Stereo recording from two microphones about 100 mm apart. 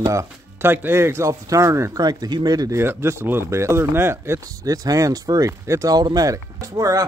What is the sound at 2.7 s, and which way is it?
Speech, 25° right (ahead or behind).